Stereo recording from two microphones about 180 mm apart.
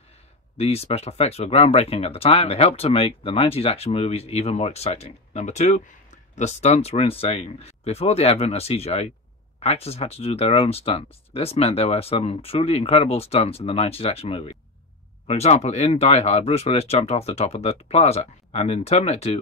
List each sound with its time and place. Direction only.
0.6 s speech: 35° left (ahead or behind)